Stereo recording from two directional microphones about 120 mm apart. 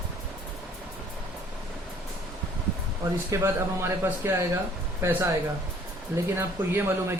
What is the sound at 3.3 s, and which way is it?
Speech, 20° right (ahead or behind).